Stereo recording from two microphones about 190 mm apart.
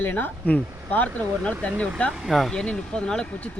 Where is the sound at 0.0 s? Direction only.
10° left (ahead or behind).